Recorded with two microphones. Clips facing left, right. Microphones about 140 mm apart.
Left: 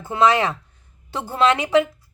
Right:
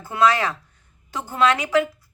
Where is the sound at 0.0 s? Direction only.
20° left (ahead or behind).